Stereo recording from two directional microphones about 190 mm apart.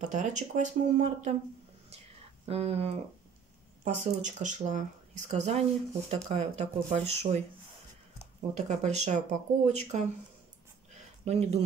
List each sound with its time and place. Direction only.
0.1 s speech: 40° right (ahead or behind)
2.4 s speech: 30° right (ahead or behind)
8.5 s speech: 35° right (ahead or behind)
11.2 s speech: 35° right (ahead or behind)